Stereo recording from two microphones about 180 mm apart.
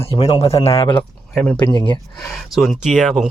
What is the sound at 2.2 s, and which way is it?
Speech, centre (ahead or behind).